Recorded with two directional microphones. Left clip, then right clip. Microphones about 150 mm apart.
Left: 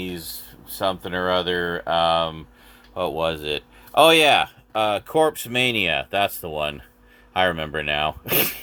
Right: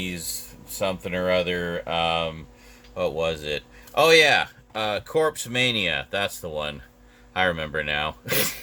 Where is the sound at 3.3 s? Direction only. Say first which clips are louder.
Left 2 dB; 15° right (ahead or behind).